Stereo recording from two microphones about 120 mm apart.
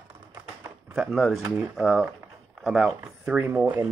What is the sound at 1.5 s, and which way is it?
Speech, 15° right (ahead or behind).